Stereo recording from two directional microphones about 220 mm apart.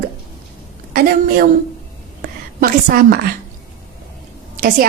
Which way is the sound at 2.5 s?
40° right (ahead or behind).